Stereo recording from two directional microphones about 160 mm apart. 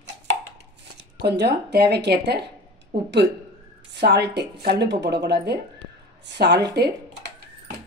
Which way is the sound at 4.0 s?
90° right.